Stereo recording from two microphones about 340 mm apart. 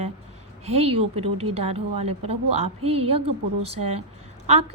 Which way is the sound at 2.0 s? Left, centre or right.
Right.